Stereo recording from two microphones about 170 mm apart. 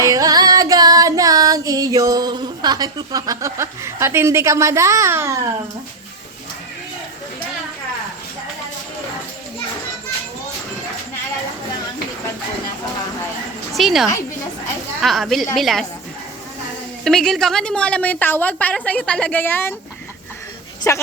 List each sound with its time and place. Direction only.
0.0 s music: 20° right (ahead or behind)
13.7 s a woman's voice: centre (ahead or behind)
17.0 s a woman's voice: 5° left (ahead or behind)
20.9 s a woman's voice: 15° left (ahead or behind)